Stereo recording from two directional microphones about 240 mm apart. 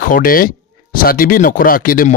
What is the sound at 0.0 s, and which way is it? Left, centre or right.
Speech, left.